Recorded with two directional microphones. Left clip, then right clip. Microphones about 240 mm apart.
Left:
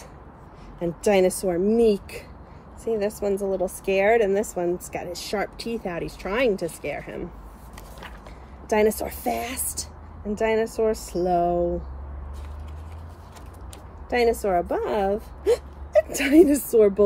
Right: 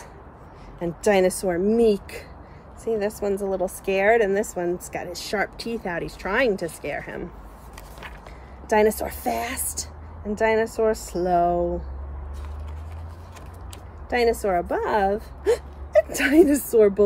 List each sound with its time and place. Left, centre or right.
0.7 s a woman's voice: centre
1.8 s speech: left
2.8 s a woman's voice: centre
8.6 s a woman's voice: centre
14.4 s speech: centre